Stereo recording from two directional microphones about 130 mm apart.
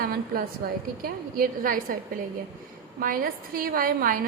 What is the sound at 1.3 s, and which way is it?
Speech, 90° right.